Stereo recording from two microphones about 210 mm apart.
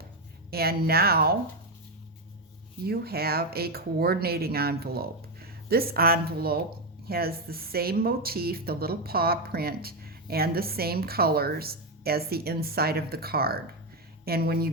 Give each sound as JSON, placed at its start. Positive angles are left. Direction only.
{"t": 0.5, "sound": "speech", "side_deg": -45}
{"t": 2.8, "sound": "speech", "side_deg": -45}